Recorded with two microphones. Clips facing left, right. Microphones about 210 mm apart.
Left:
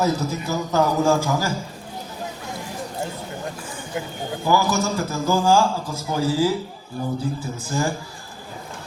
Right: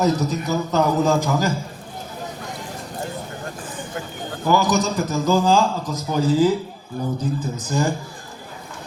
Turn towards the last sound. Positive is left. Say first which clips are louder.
# right 2 dB
turn(degrees=-20)  # may be behind; listen again after turning